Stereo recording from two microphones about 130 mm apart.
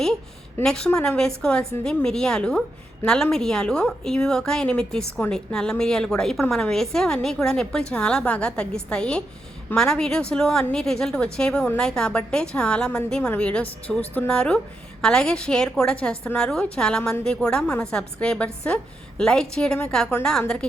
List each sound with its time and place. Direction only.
0.6 s a woman's voice: 5° left (ahead or behind)